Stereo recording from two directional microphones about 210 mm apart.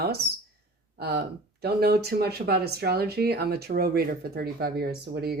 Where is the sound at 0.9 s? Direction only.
50° right (ahead or behind).